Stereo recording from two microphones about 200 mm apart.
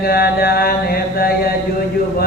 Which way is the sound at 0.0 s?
50° left (ahead or behind).